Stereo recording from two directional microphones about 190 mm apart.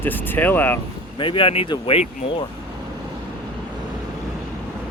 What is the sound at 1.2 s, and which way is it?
Speech, 25° left (ahead or behind).